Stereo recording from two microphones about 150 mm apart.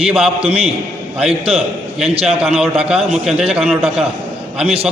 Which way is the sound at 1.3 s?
40° right (ahead or behind).